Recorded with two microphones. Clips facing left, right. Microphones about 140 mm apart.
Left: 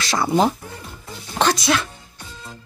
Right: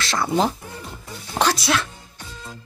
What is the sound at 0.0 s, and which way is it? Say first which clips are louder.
Speech: left 3 dB; 5° left (ahead or behind).